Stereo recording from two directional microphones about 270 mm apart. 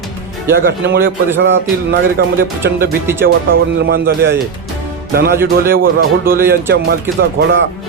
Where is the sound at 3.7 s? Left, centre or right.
Right.